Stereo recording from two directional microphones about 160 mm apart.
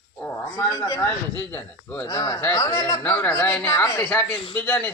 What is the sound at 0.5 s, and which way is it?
Speech, 20° left (ahead or behind).